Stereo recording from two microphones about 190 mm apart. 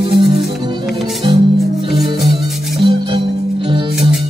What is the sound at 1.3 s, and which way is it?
Music, 25° right (ahead or behind).